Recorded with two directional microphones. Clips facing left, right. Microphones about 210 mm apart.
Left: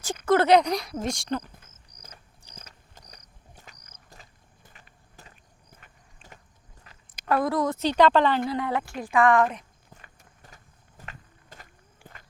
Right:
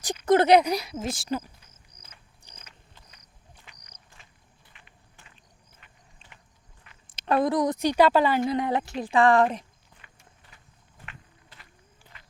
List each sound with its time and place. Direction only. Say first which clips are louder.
0.3 s speech: right 1 dB; 15° right (ahead or behind)
1.9 s cricket: left 6 dB; 25° right (ahead or behind)
2.6 s cricket: left 5 dB; 40° left (ahead or behind)
4.1 s vehicle: left 5 dB; 40° left (ahead or behind)
5.8 s a sound: left 3 dB; 45° left (ahead or behind)
7.1 s a woman's voice: right 1 dB; 25° right (ahead or behind); by 8.4 s 10° right (ahead or behind)
8.4 s speech: right 2 dB; 20° right (ahead or behind)
9.9 s clip-clop: left 7 dB; 45° left (ahead or behind)
11.0 s walk: left 2 dB; 40° left (ahead or behind)